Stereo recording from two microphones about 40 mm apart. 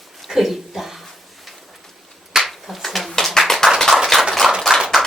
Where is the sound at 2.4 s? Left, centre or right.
Centre.